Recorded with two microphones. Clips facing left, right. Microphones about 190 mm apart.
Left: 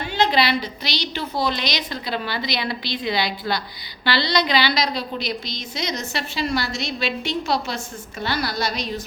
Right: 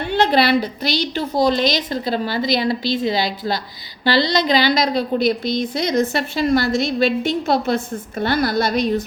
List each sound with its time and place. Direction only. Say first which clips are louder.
0.1 s a woman's voice: right 5 dB; 55° right (ahead or behind)